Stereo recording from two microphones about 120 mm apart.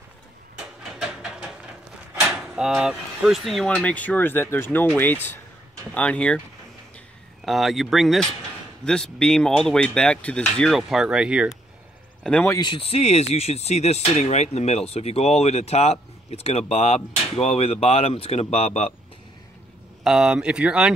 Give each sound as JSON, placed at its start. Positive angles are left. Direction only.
{"t": 2.1, "sound": "speech", "side_deg": 0}
{"t": 7.4, "sound": "speech", "side_deg": 0}
{"t": 10.8, "sound": "speech", "side_deg": -5}
{"t": 12.2, "sound": "speech", "side_deg": 10}
{"t": 12.4, "sound": "speech", "side_deg": 40}
{"t": 20.0, "sound": "speech", "side_deg": -5}